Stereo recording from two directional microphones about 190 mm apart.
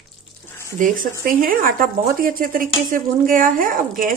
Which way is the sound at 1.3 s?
50° right (ahead or behind).